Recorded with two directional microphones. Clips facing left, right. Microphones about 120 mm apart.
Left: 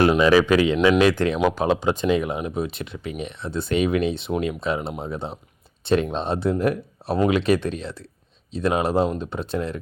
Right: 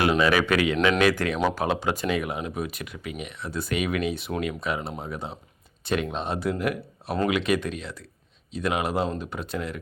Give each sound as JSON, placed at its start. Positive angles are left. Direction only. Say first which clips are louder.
{"t": 0.2, "sound": "speech", "louder": "left 5 dB", "side_deg": 30}
{"t": 1.4, "sound": "speech", "louder": "left 4 dB", "side_deg": 10}